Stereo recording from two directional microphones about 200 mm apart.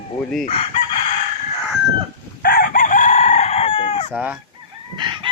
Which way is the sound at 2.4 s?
45° left (ahead or behind).